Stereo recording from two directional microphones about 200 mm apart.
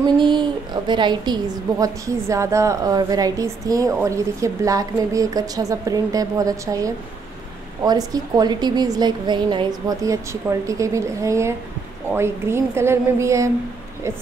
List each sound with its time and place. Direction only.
0.0 s a woman's voice: 25° right (ahead or behind)